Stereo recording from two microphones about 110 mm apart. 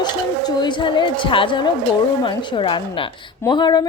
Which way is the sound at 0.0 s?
40° left (ahead or behind).